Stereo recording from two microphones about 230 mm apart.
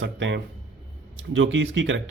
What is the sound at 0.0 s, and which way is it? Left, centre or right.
Speech, right.